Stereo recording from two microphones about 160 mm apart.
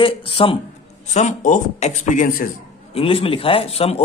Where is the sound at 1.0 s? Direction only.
50° left (ahead or behind).